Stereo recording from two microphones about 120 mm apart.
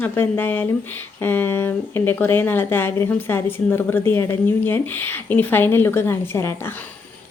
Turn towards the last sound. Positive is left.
turn(degrees=20)  # may be behind; listen again after turning